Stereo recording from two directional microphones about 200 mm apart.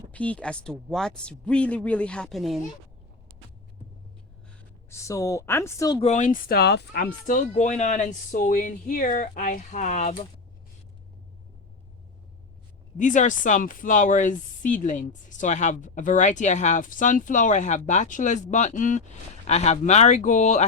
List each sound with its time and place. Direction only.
0.1 s speech: 5° left (ahead or behind)
4.9 s a woman's voice: 15° left (ahead or behind)
6.0 s speech: 35° left (ahead or behind)
13.0 s speech: 40° left (ahead or behind)